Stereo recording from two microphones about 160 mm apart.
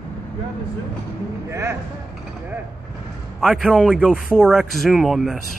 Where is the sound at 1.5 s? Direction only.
15° right (ahead or behind).